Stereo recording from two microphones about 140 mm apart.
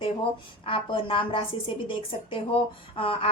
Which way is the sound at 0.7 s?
40° left (ahead or behind).